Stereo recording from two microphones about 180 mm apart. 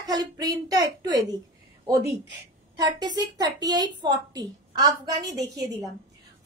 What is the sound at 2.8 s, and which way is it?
A woman's voice, 25° right (ahead or behind).